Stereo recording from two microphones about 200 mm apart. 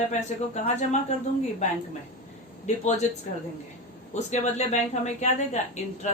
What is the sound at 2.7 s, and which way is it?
Speech, 35° left (ahead or behind).